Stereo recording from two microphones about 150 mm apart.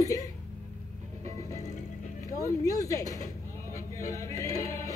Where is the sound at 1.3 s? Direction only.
20° left (ahead or behind).